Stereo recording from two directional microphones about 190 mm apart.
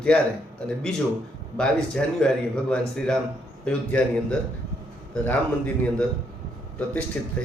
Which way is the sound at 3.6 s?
5° left (ahead or behind).